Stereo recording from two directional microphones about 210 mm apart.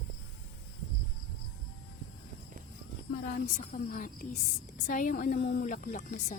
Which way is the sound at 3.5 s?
40° left (ahead or behind).